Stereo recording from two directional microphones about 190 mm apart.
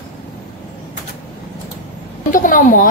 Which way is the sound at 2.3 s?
45° left (ahead or behind).